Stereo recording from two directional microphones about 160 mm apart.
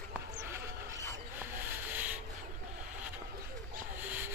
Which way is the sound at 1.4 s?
10° right (ahead or behind).